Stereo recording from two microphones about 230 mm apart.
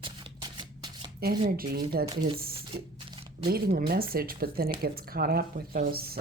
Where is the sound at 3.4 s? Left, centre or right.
Right.